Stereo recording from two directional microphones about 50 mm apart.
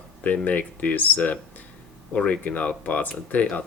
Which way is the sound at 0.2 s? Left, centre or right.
Left.